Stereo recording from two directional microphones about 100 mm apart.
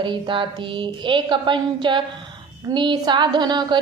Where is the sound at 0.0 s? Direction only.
55° right (ahead or behind).